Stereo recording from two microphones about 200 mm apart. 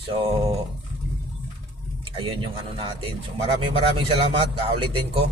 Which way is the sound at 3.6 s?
25° right (ahead or behind).